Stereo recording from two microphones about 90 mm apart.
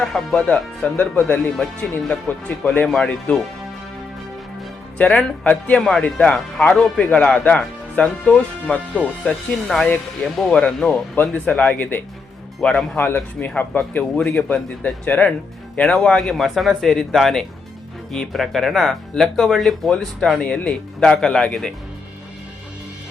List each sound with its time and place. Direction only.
0.0 s speech: centre (ahead or behind)
0.4 s speech: 10° left (ahead or behind)
4.9 s speech: 15° left (ahead or behind)
9.6 s speech: 5° left (ahead or behind); by 12.0 s 20° left (ahead or behind)
12.6 s speech: 5° left (ahead or behind)
13.0 s speech: 20° left (ahead or behind)